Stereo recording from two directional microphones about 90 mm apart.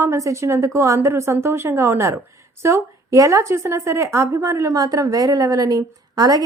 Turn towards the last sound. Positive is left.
turn(degrees=-45)  # may be behind; listen again after turning